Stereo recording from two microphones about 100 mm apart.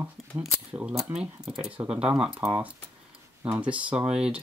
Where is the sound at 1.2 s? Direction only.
5° right (ahead or behind).